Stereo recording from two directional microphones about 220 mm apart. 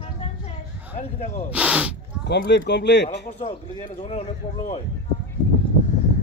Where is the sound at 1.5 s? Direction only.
5° right (ahead or behind).